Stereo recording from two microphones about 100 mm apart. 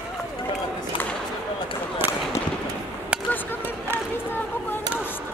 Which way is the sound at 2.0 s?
20° right (ahead or behind).